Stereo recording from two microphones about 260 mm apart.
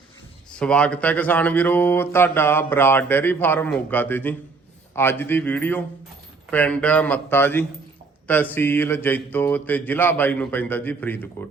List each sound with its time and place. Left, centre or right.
0.5 s speech: centre